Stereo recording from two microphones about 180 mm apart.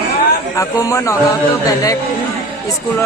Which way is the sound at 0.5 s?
15° left (ahead or behind).